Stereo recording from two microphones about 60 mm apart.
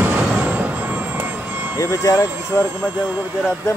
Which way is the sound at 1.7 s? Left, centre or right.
Left.